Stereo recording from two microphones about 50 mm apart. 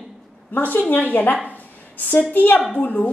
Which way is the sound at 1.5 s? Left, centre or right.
Left.